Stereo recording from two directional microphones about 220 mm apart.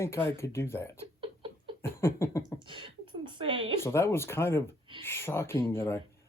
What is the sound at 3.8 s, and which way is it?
Speech, 10° left (ahead or behind).